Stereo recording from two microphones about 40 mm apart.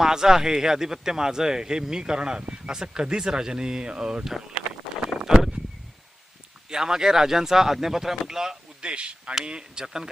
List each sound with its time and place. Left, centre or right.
0.0 s speech: centre
5.2 s a sound: centre
6.7 s speech: centre
8.8 s speech: right